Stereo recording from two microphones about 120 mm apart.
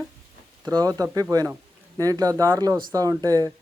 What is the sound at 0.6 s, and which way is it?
A man's voice, 30° right (ahead or behind).